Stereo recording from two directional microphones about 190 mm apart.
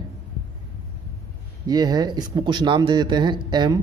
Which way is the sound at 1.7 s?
20° right (ahead or behind).